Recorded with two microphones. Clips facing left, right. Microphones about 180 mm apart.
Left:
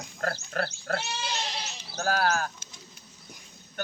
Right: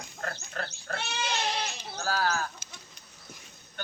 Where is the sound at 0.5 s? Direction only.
65° left (ahead or behind).